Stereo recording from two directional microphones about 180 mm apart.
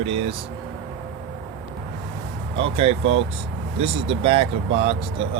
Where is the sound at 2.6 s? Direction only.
30° right (ahead or behind).